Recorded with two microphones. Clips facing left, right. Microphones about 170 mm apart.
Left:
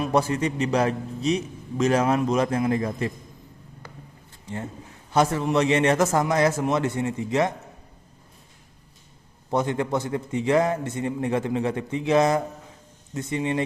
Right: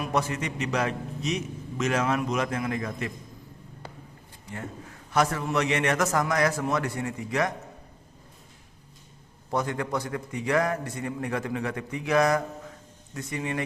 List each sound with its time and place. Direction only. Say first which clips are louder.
0.0 s a man's voice: left 5 dB; 30° left (ahead or behind)
4.4 s a man's voice: left 4 dB; 30° left (ahead or behind)
9.5 s a man's voice: left 4 dB; 25° left (ahead or behind)